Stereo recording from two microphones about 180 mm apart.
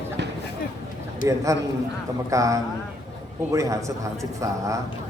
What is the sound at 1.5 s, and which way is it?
A man's voice, 20° right (ahead or behind).